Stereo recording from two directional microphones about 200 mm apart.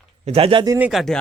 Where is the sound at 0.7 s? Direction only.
5° right (ahead or behind).